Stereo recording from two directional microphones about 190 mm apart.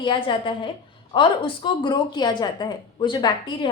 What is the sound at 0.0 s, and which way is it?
Speech, 25° left (ahead or behind).